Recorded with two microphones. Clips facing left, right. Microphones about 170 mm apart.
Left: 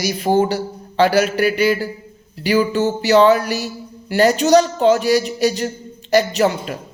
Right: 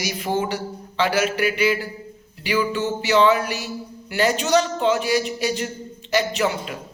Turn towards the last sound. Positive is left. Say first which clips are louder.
# left 5 dB
turn(degrees=40)  # may be behind; listen again after turning